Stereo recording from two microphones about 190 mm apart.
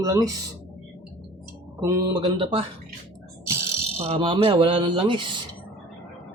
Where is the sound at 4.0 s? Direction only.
30° right (ahead or behind).